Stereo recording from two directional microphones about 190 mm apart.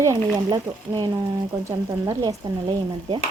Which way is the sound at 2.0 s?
20° right (ahead or behind).